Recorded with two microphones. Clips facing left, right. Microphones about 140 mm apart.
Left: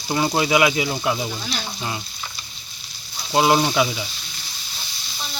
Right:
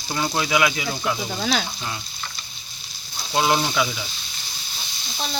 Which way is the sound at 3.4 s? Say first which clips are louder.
Left 3 dB; 25° left (ahead or behind).